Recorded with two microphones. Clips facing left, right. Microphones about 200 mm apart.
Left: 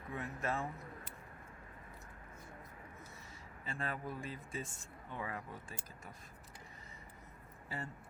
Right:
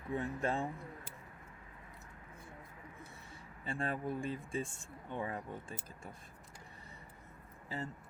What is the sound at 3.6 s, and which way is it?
Speech, 30° right (ahead or behind).